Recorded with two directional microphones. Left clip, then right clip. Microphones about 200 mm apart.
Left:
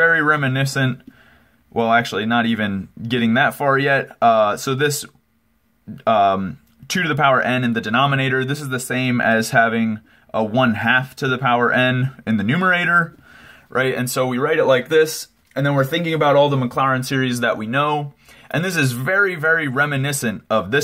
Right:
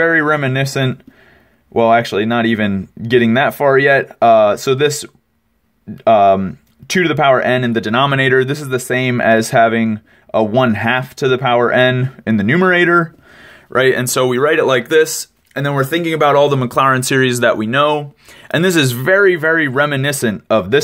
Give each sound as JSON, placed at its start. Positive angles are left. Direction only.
{"t": 0.0, "sound": "speech", "side_deg": -30}
{"t": 6.0, "sound": "speech", "side_deg": -35}